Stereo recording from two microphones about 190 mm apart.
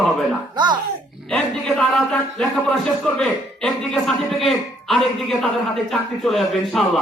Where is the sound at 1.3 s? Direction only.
Centre (ahead or behind).